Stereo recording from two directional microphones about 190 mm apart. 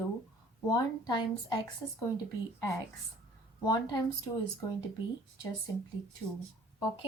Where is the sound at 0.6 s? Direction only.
20° left (ahead or behind).